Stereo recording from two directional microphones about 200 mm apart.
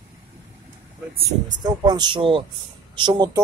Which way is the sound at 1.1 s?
20° right (ahead or behind).